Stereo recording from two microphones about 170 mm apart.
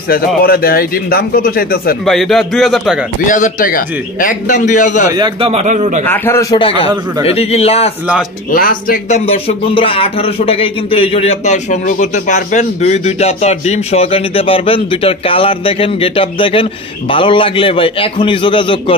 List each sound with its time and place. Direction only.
0.4 s speech: 60° left (ahead or behind)
2.0 s a man's voice: centre (ahead or behind)
3.3 s a man's voice: 50° left (ahead or behind)
5.1 s a man's voice: 25° right (ahead or behind)
5.5 s a man's voice: 40° right (ahead or behind)
6.0 s a man's voice: 15° left (ahead or behind)
7.2 s speech: 35° left (ahead or behind)
8.5 s speech: 55° left (ahead or behind)
9.1 s speech: 35° left (ahead or behind)